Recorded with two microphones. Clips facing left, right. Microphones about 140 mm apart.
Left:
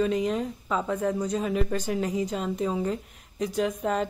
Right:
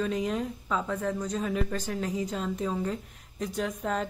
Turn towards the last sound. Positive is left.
turn(degrees=5)  # may be behind; listen again after turning